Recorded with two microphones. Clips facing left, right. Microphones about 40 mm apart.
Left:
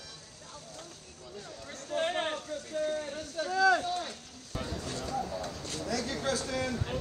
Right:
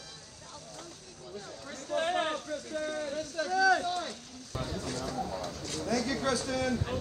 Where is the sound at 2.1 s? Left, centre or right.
Right.